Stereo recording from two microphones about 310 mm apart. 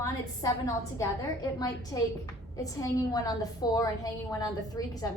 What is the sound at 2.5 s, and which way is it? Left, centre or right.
A woman's voice, centre.